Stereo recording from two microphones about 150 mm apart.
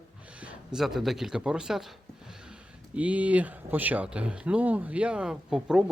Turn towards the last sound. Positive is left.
turn(degrees=-5)  # may be behind; listen again after turning